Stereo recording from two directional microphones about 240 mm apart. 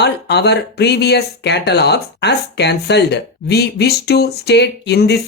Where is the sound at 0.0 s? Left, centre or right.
Left.